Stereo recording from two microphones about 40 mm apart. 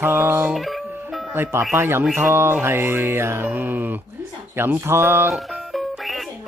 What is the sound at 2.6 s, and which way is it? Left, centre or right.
Speech, right.